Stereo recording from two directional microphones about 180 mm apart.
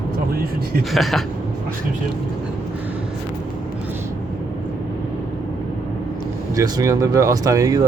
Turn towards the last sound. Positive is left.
turn(degrees=-20)  # may be behind; listen again after turning